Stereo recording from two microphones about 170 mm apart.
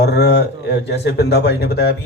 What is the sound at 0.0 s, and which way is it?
A man's voice, 75° left (ahead or behind).